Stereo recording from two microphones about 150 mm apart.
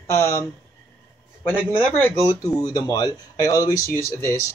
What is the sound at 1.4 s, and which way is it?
A man's voice, 10° left (ahead or behind).